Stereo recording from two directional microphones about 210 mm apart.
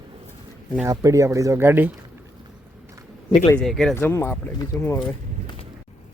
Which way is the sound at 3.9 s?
10° left (ahead or behind).